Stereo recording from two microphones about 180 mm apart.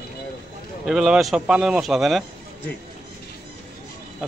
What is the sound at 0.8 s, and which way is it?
Speech, 5° right (ahead or behind).